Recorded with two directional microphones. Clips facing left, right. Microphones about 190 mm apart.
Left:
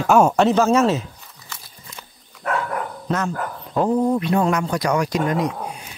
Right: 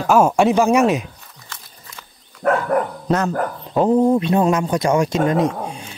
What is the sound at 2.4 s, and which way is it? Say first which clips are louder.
Dog: right 7 dB; 40° right (ahead or behind).